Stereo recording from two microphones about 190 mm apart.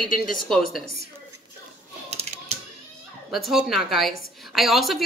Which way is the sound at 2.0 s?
35° right (ahead or behind).